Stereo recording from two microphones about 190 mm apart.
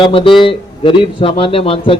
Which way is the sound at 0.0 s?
30° left (ahead or behind).